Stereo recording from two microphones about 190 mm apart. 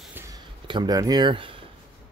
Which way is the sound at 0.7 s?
20° right (ahead or behind).